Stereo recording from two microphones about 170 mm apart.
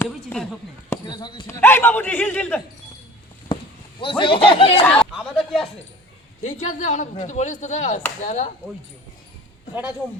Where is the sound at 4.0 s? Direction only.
30° left (ahead or behind).